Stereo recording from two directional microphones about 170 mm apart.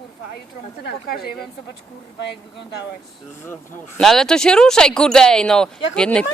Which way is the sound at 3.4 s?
10° left (ahead or behind).